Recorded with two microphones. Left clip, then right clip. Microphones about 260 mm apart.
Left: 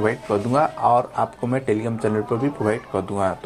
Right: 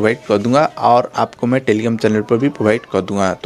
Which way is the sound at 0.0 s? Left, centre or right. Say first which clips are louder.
Right 6 dB; right.